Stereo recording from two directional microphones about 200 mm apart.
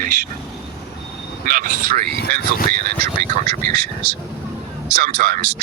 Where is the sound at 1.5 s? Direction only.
40° right (ahead or behind).